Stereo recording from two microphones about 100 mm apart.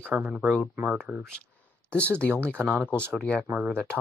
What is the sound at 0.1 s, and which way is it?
Speech, 10° right (ahead or behind).